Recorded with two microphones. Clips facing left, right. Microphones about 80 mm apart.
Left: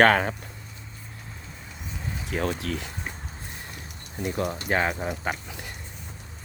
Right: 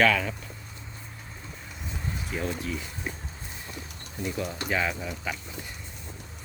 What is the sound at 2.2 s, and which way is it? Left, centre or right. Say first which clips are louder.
Speech: left 4 dB; left.